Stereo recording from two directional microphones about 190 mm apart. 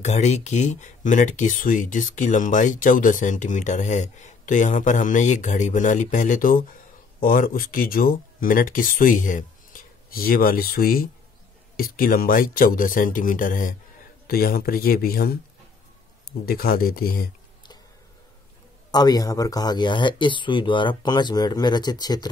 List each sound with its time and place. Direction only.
0.0 s speech: 35° left (ahead or behind); by 15.3 s 50° left (ahead or behind)
16.4 s speech: 50° left (ahead or behind)
18.9 s speech: 20° left (ahead or behind)